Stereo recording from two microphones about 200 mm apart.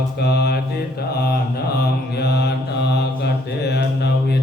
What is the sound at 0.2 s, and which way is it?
Mantra, 55° left (ahead or behind).